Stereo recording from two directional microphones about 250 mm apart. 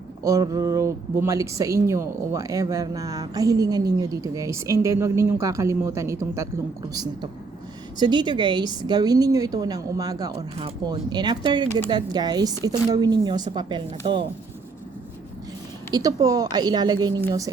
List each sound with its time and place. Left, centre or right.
0.2 s speech: centre
15.9 s speech: centre